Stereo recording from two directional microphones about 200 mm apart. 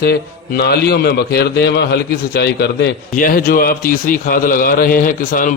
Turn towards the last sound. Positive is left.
turn(degrees=40)  # may be behind; listen again after turning